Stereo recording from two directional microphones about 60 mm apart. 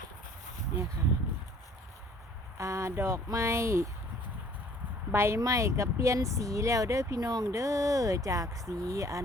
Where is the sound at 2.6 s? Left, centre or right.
Right.